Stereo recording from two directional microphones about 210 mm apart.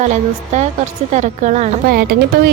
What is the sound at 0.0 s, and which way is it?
A woman's voice, 35° right (ahead or behind).